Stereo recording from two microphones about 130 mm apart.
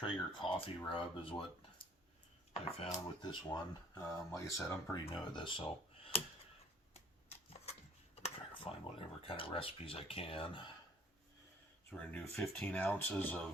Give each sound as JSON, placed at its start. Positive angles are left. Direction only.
{"t": 0.0, "sound": "speech", "side_deg": 40}
{"t": 3.2, "sound": "speech", "side_deg": 30}
{"t": 5.1, "sound": "speech", "side_deg": 40}
{"t": 8.2, "sound": "speech", "side_deg": 45}
{"t": 11.9, "sound": "speech", "side_deg": 10}